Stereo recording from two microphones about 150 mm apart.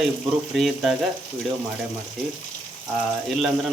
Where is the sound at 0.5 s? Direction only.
Centre (ahead or behind).